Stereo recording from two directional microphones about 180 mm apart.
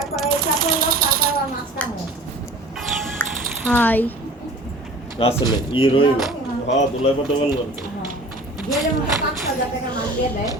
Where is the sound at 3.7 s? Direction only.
10° left (ahead or behind).